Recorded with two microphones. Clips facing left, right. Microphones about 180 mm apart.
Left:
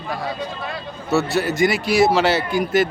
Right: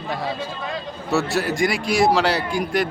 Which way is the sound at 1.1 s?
Centre (ahead or behind).